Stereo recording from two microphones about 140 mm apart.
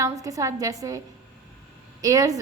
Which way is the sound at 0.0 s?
25° right (ahead or behind).